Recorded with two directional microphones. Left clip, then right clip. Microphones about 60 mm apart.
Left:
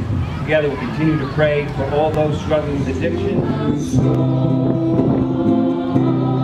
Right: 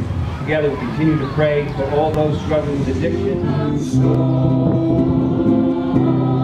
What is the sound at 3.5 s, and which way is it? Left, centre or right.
Music, centre.